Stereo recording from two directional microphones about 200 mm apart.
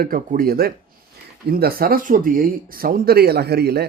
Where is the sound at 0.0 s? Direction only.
45° right (ahead or behind).